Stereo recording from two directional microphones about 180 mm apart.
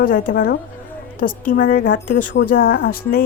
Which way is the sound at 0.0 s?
50° left (ahead or behind).